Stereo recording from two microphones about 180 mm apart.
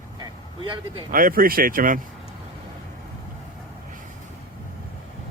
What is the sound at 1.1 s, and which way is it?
Speech, 50° right (ahead or behind).